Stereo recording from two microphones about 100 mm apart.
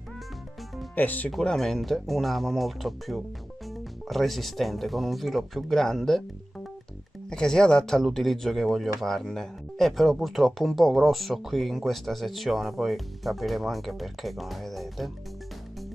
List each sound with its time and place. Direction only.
0.9 s speech: 15° left (ahead or behind)
1.3 s speech: 5° left (ahead or behind)
7.2 s speech: 5° left (ahead or behind)